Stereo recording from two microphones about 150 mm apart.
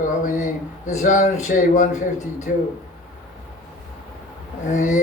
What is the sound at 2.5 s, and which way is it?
Speech, 85° left.